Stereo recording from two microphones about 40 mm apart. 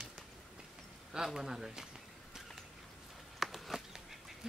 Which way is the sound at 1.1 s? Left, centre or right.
Centre.